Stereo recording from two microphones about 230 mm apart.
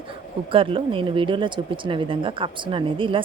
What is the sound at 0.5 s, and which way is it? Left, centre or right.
Speech, right.